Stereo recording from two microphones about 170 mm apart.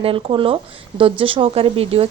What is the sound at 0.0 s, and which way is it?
Speech, 30° right (ahead or behind).